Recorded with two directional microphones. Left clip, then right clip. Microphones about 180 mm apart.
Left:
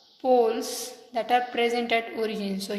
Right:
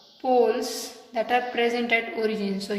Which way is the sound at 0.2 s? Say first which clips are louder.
Right 1 dB; 30° left (ahead or behind).